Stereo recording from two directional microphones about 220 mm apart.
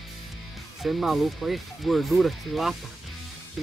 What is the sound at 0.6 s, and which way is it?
Speech, centre (ahead or behind).